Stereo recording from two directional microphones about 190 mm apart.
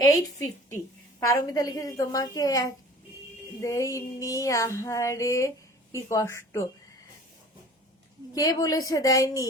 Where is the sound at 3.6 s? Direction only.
15° left (ahead or behind).